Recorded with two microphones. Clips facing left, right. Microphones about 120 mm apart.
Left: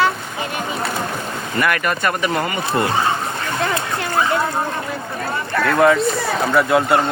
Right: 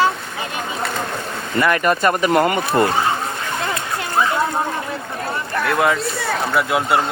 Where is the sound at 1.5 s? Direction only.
20° right (ahead or behind).